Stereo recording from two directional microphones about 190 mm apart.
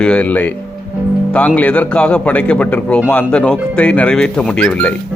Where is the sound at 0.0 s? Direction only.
5° left (ahead or behind).